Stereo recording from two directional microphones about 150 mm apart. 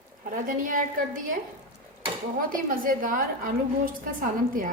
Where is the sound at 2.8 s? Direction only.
65° right (ahead or behind).